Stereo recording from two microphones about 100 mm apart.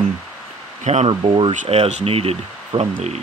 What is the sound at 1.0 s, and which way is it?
Speech, 60° right (ahead or behind).